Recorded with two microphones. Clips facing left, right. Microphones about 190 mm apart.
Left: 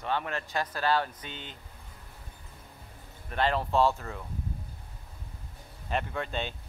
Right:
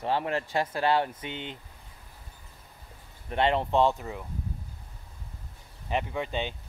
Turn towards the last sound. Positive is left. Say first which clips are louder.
# right 2 dB
turn(degrees=-15)  # may be behind; listen again after turning